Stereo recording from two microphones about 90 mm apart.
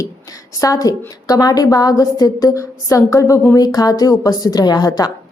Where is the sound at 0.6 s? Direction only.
40° left (ahead or behind).